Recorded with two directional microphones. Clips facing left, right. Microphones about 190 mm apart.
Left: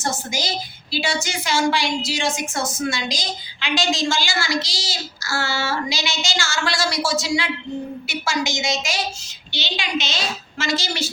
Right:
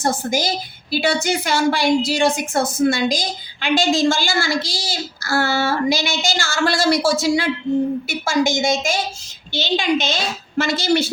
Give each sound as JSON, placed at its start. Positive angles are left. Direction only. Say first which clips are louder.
{"t": 0.0, "sound": "a woman's voice", "louder": "right 6 dB", "side_deg": -55}